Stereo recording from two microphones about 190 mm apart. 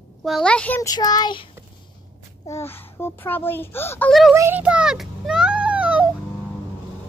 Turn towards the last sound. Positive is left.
turn(degrees=-5)  # may be behind; listen again after turning